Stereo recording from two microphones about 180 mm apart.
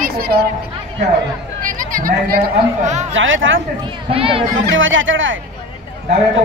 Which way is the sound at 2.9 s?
40° right (ahead or behind).